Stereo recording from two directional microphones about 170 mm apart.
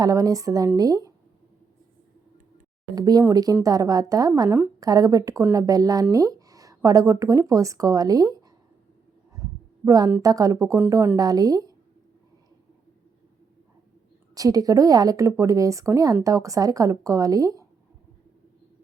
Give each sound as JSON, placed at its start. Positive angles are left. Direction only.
{"t": 0.0, "sound": "speech", "side_deg": -20}
{"t": 2.9, "sound": "speech", "side_deg": -20}
{"t": 9.8, "sound": "a woman's voice", "side_deg": -20}
{"t": 14.3, "sound": "speech", "side_deg": -20}